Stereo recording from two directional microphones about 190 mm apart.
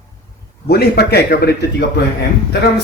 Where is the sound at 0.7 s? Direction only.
55° left (ahead or behind).